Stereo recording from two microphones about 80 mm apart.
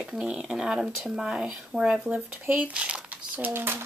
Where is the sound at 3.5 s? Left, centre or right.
Right.